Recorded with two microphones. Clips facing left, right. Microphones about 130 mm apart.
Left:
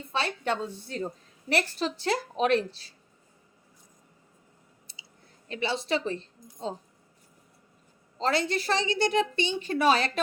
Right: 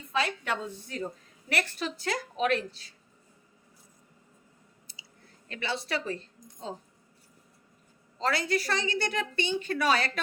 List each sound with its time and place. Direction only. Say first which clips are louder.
0.1 s a woman's voice: left 1 dB; 30° left (ahead or behind)
5.5 s a woman's voice: left 4 dB; 20° left (ahead or behind)
8.2 s a woman's voice: left 2 dB; 25° left (ahead or behind)